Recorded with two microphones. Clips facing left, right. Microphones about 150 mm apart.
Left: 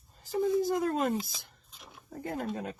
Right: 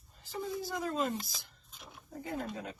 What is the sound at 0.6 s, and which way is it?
Speech, 55° left (ahead or behind).